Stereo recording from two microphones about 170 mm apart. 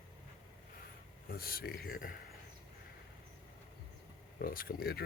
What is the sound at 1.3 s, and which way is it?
Speech, 60° left (ahead or behind).